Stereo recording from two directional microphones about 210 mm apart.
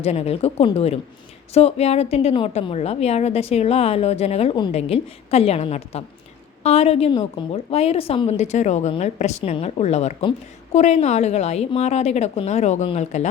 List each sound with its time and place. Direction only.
0.0 s a woman's voice: 30° left (ahead or behind)